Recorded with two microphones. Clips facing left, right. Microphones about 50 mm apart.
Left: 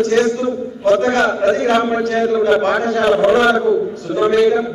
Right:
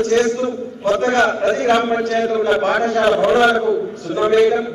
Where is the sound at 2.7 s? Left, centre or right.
Right.